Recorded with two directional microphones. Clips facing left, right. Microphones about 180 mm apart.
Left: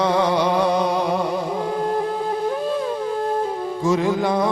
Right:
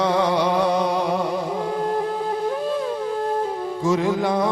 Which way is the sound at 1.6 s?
30° left (ahead or behind).